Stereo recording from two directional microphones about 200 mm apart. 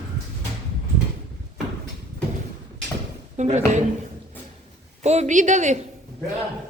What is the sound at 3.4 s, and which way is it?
Speech, 35° right (ahead or behind).